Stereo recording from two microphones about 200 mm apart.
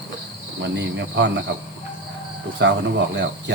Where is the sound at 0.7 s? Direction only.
60° right (ahead or behind).